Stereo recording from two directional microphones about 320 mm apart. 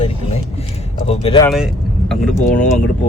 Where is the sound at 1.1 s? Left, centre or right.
Centre.